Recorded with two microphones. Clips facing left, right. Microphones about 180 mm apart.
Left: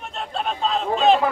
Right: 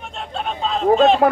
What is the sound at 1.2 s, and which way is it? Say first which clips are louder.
Speech: right 7 dB; 70° right (ahead or behind).